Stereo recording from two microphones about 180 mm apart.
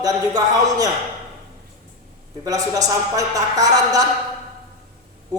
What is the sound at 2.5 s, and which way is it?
Speech, 20° right (ahead or behind).